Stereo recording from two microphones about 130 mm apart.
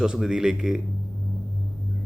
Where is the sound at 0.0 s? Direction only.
5° right (ahead or behind).